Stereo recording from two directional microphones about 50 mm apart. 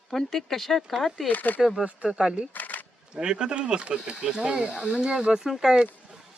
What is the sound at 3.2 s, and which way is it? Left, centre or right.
Speech, centre.